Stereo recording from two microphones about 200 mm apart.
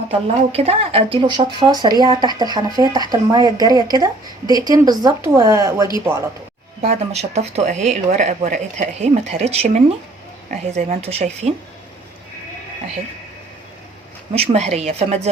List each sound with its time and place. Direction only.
0.1 s speech: 30° right (ahead or behind)
6.8 s speech: 35° right (ahead or behind)
14.3 s speech: 35° right (ahead or behind)